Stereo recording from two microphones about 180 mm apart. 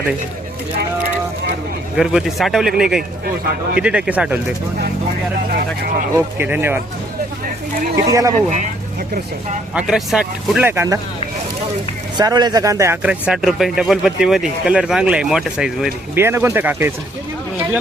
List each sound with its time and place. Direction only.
2.0 s speech: centre (ahead or behind)
6.1 s speech: 10° right (ahead or behind)
7.9 s speech: 20° right (ahead or behind)
8.4 s speech: 40° right (ahead or behind)
9.7 s speech: 5° right (ahead or behind)
12.1 s speech: 25° right (ahead or behind)